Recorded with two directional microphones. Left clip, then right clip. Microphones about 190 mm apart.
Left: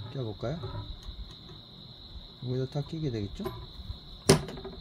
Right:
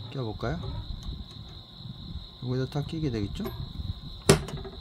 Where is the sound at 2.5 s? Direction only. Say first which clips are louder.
Right 2 dB; 25° right (ahead or behind).